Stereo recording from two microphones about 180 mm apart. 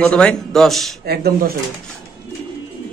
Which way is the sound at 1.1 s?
60° right (ahead or behind).